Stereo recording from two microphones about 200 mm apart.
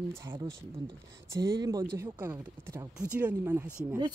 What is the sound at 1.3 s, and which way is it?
Speech, 15° right (ahead or behind).